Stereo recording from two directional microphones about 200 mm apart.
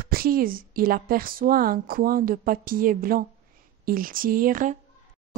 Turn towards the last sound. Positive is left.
turn(degrees=-40)  # may be behind; listen again after turning